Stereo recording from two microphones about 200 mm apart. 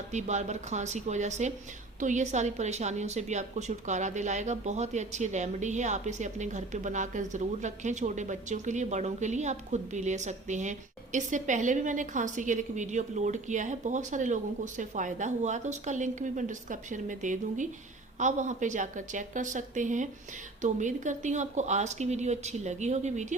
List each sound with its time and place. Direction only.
0.1 s a woman's voice: 35° right (ahead or behind)